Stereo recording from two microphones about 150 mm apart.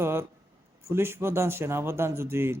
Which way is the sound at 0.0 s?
15° right (ahead or behind).